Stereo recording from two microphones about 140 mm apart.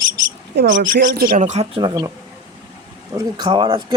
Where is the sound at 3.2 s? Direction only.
30° right (ahead or behind).